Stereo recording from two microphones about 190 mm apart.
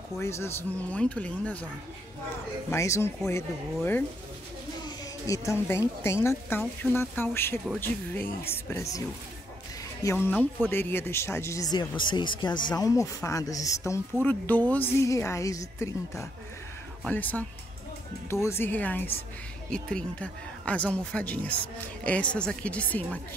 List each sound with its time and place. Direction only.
0.2 s a woman's voice: 15° left (ahead or behind)
2.7 s a woman's voice: 15° left (ahead or behind)
10.0 s a woman's voice: 10° left (ahead or behind)